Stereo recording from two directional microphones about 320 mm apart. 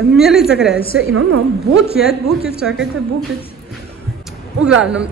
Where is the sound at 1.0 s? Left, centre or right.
Right.